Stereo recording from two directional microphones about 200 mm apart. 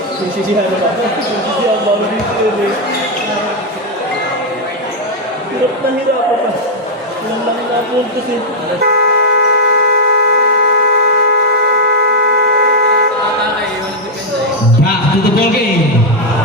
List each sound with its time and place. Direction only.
8.8 s vehicle: 50° right (ahead or behind)